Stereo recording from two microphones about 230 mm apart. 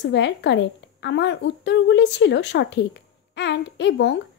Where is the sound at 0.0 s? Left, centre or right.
Left.